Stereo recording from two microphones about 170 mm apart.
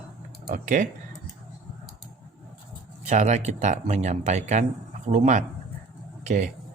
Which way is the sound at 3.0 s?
45° right (ahead or behind).